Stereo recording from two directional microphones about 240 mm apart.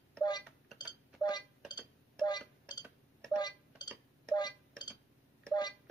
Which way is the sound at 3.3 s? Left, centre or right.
Centre.